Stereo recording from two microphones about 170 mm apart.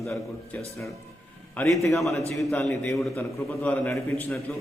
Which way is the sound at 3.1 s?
15° left (ahead or behind).